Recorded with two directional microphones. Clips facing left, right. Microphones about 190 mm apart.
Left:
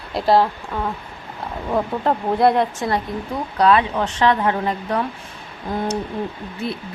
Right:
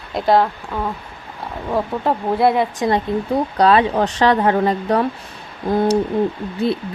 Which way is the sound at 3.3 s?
35° right (ahead or behind).